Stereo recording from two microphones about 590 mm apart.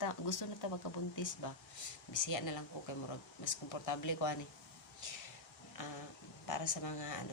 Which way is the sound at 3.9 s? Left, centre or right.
Left.